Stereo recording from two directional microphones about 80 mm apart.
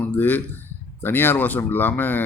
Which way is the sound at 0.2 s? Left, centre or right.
Left.